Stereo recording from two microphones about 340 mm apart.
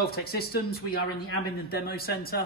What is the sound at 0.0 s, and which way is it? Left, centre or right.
Speech, left.